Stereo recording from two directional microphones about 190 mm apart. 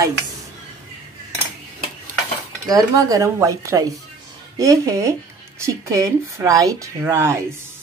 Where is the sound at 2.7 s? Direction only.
20° right (ahead or behind).